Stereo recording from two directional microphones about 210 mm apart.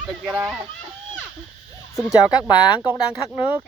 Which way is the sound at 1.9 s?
5° right (ahead or behind).